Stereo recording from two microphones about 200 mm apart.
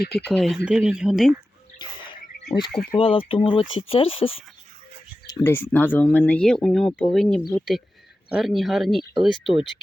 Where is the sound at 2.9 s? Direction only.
25° left (ahead or behind).